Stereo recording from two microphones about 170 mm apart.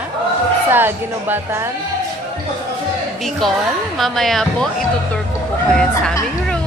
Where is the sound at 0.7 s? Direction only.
10° right (ahead or behind).